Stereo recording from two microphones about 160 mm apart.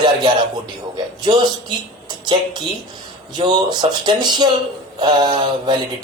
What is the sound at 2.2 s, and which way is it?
A woman's voice, 30° right (ahead or behind).